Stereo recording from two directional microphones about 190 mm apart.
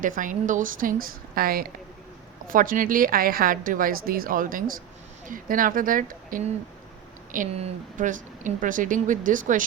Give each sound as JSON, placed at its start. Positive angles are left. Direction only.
{"t": 0.0, "sound": "speech", "side_deg": -45}